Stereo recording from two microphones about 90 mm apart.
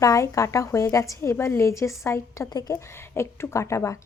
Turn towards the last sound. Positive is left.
turn(degrees=35)  # may be behind; listen again after turning